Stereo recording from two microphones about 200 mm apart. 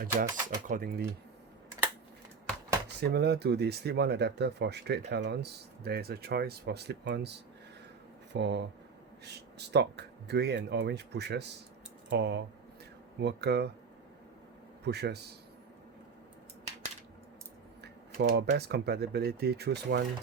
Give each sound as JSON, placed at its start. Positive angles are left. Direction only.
{"t": 0.2, "sound": "speech", "side_deg": -45}
{"t": 3.0, "sound": "speech", "side_deg": -55}
{"t": 14.8, "sound": "speech", "side_deg": -55}
{"t": 17.8, "sound": "speech", "side_deg": -55}